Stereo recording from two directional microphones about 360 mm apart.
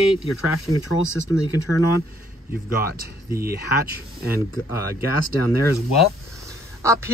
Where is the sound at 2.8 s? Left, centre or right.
Right.